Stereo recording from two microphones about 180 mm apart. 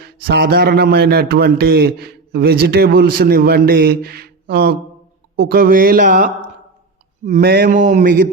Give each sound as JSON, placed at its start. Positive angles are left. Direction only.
{"t": 0.0, "sound": "a man's voice", "side_deg": -60}
{"t": 7.4, "sound": "speech", "side_deg": -55}